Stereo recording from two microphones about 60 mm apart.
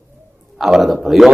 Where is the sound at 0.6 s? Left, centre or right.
Centre.